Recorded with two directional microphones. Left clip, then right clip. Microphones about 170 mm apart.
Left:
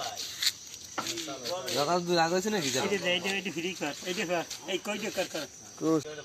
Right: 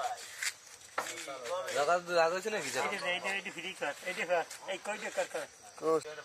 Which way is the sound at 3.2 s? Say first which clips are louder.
Left 4 dB; 10° right (ahead or behind).